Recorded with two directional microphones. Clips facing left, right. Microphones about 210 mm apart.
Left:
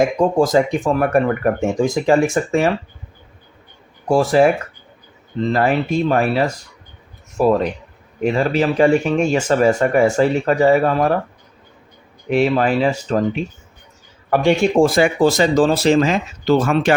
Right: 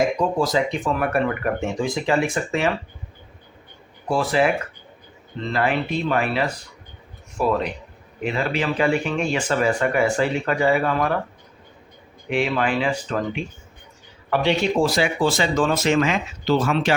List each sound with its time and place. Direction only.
0.2 s speech: 50° left (ahead or behind)
4.1 s speech: 45° left (ahead or behind)
12.3 s speech: 40° left (ahead or behind)